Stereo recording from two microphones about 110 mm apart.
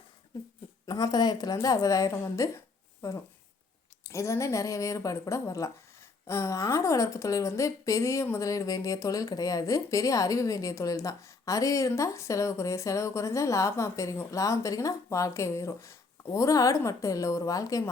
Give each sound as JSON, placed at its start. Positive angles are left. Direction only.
{"t": 0.9, "sound": "a woman's voice", "side_deg": 35}
{"t": 4.0, "sound": "a woman's voice", "side_deg": 25}